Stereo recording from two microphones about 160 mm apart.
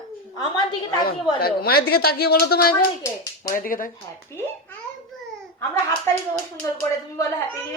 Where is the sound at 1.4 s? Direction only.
75° left (ahead or behind).